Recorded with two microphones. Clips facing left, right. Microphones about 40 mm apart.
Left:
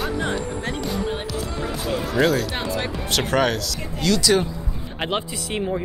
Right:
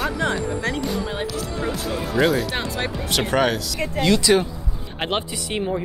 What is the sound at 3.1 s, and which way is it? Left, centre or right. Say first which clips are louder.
Speech: even; centre.